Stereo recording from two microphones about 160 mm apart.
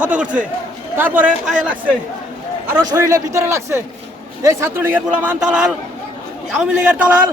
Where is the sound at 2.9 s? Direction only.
20° right (ahead or behind).